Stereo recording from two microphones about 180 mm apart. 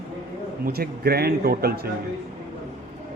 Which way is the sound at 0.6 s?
60° right (ahead or behind).